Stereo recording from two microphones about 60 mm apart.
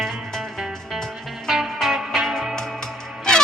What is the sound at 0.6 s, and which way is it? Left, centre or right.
Music, centre.